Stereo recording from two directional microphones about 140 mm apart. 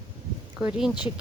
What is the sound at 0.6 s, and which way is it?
Speech, 5° right (ahead or behind).